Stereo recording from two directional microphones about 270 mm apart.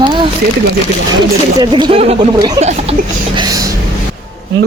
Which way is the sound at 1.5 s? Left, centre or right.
Centre.